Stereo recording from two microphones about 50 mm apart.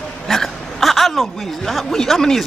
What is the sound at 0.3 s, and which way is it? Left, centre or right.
Speech, centre.